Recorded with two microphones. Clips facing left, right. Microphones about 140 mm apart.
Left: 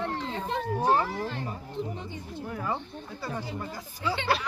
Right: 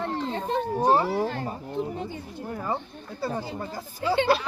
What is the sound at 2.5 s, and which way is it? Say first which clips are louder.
Speech: right 3 dB; 35° right (ahead or behind).